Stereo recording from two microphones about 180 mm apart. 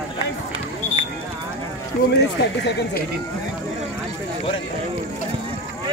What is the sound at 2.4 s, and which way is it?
Speech, 70° left (ahead or behind).